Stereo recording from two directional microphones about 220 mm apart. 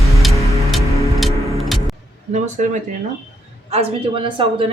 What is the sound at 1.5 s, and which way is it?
Music, centre (ahead or behind).